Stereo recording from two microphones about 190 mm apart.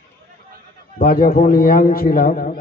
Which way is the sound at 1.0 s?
50° left (ahead or behind).